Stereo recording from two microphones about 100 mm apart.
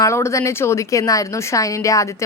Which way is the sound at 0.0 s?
30° left (ahead or behind).